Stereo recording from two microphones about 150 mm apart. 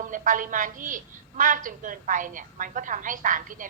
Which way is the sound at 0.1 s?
60° right (ahead or behind).